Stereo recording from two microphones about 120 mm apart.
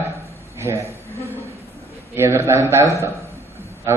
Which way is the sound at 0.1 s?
25° right (ahead or behind).